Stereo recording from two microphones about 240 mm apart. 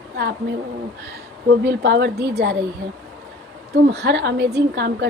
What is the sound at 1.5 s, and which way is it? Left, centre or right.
Speech, right.